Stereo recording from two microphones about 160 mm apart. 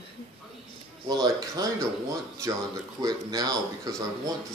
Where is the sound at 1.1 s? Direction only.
25° right (ahead or behind).